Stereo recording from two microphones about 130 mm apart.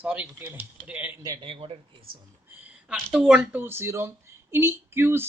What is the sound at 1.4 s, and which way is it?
Speech, 45° right (ahead or behind).